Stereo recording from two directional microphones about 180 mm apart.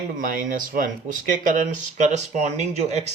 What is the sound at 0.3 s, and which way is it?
Speech, 50° right (ahead or behind).